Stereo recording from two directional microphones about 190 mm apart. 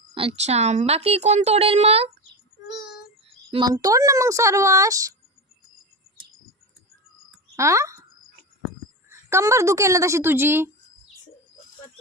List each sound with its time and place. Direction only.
0.1 s speech: 30° right (ahead or behind)
3.2 s a sound: 30° right (ahead or behind)
3.7 s speech: 20° right (ahead or behind)
7.5 s speech: 15° right (ahead or behind)
9.0 s speech: 15° right (ahead or behind)